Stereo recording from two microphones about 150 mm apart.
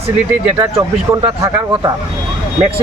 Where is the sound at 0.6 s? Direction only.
25° right (ahead or behind).